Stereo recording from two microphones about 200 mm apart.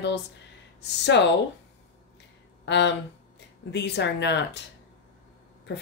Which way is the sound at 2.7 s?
60° left (ahead or behind).